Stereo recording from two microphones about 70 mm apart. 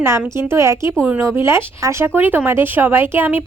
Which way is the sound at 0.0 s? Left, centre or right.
Right.